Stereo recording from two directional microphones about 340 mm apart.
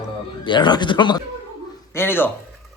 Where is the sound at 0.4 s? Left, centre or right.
Centre.